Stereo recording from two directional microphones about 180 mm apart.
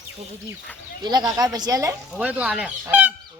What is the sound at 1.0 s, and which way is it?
Speech, 20° right (ahead or behind).